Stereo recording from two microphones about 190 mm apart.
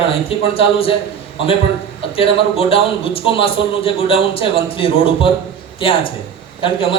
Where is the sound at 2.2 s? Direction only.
30° left (ahead or behind).